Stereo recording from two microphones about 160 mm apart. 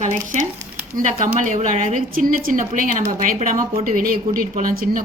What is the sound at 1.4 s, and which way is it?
A woman's voice, 50° right (ahead or behind).